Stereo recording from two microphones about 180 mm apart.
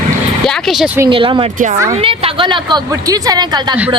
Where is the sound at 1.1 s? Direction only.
30° right (ahead or behind).